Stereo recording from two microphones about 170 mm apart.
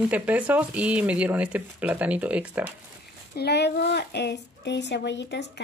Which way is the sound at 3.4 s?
80° left.